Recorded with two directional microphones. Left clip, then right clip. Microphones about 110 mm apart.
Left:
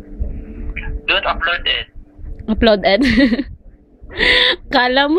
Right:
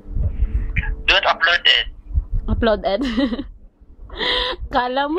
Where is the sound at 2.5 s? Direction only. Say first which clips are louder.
Left 5 dB; 5° left (ahead or behind).